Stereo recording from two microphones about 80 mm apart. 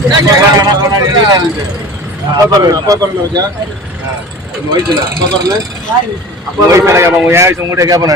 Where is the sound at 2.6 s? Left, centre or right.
Right.